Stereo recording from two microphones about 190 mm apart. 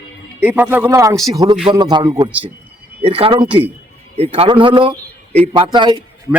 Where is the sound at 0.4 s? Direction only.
10° right (ahead or behind); by 6.0 s 25° right (ahead or behind).